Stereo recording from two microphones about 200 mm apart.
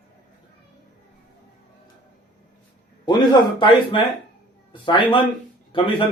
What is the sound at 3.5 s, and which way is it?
A man's voice, 25° left (ahead or behind).